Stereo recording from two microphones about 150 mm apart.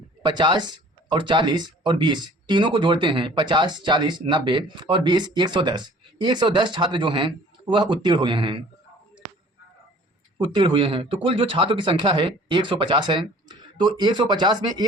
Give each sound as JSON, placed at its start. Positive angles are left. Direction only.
{"t": 0.2, "sound": "speech", "side_deg": -30}
{"t": 10.3, "sound": "speech", "side_deg": -35}